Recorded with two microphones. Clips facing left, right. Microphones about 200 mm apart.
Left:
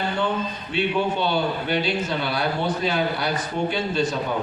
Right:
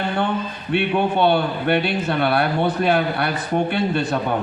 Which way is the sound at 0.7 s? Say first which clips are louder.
Right 4 dB; 60° right (ahead or behind).